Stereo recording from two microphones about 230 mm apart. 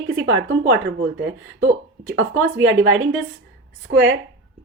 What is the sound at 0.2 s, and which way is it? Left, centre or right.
Speech, right.